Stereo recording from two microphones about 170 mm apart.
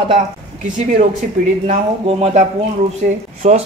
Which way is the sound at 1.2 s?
55° right (ahead or behind).